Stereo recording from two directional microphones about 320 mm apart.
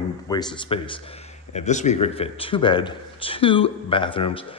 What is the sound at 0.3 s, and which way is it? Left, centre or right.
Speech, centre.